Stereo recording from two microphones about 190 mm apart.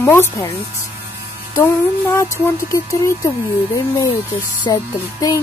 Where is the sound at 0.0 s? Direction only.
15° left (ahead or behind).